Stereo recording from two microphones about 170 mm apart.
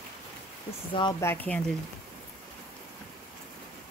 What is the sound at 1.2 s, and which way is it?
Speech, 10° left (ahead or behind).